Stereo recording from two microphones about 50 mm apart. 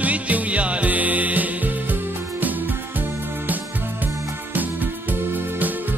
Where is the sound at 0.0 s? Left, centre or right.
Right.